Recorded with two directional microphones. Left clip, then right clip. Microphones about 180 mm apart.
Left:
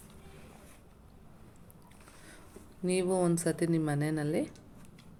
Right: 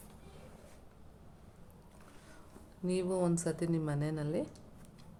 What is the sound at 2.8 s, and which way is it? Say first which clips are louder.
A woman's voice: left 4 dB; 15° left (ahead or behind).